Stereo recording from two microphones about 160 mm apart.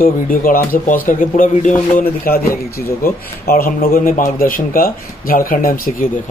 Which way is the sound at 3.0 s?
65° left (ahead or behind).